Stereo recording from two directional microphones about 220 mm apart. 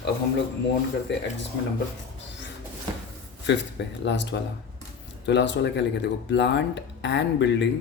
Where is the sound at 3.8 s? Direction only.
50° left (ahead or behind).